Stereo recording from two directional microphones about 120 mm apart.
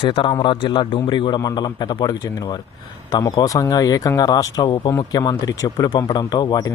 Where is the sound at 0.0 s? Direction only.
45° left (ahead or behind).